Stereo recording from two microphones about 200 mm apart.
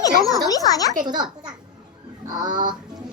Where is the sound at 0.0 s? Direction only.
15° left (ahead or behind).